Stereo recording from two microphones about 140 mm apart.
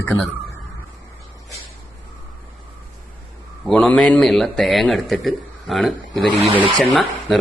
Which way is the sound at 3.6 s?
5° left (ahead or behind).